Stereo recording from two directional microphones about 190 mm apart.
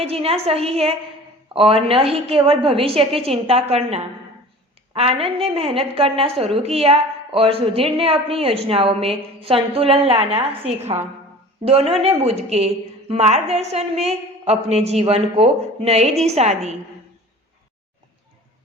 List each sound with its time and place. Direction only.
0.0 s a woman's voice: 30° right (ahead or behind)